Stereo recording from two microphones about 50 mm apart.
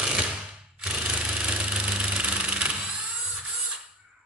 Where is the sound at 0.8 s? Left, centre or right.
Right.